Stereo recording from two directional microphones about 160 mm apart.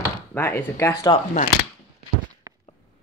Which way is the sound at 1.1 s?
50° left (ahead or behind).